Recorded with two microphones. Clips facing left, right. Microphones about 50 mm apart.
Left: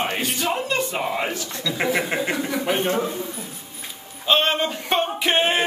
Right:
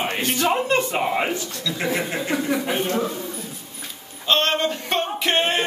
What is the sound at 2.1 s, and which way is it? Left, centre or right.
Speech, centre.